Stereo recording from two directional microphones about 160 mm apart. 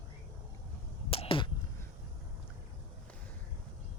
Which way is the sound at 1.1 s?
35° left (ahead or behind).